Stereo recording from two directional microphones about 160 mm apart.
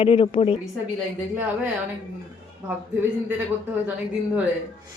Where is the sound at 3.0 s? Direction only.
15° right (ahead or behind).